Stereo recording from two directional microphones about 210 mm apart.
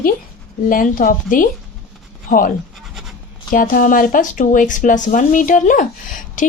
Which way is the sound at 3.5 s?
40° left (ahead or behind).